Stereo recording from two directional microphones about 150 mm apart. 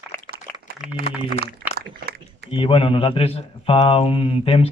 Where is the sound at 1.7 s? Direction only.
90° right.